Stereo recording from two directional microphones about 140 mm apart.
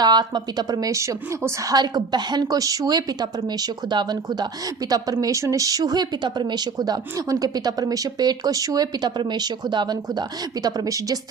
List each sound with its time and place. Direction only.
0.0 s speech: 30° right (ahead or behind)